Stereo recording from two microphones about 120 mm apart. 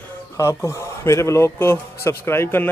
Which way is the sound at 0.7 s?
25° left (ahead or behind).